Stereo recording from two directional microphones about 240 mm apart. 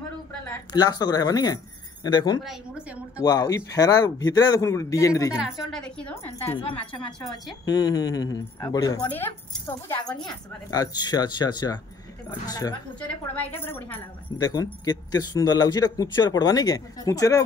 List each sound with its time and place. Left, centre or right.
0.5 s speech: centre
5.4 s a woman's voice: centre
6.4 s speech: left
7.1 s a woman's voice: centre
7.6 s speech: centre